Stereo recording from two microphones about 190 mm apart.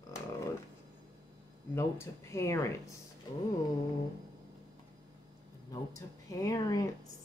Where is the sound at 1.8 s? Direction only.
15° left (ahead or behind).